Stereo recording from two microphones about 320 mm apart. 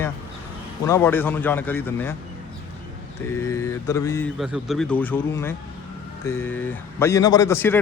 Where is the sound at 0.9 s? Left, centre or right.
Centre.